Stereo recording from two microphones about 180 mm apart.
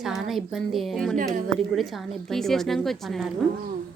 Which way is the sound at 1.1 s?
45° right (ahead or behind).